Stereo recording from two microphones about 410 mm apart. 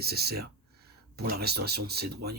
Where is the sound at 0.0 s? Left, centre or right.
Right.